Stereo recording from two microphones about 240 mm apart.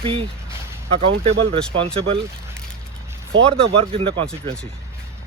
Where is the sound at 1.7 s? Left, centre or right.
Right.